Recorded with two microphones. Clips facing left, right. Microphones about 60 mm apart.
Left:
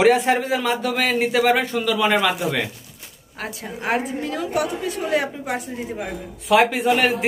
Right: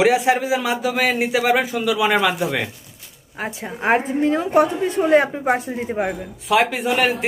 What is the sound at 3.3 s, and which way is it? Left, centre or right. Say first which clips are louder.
A woman's voice: right 3 dB; centre.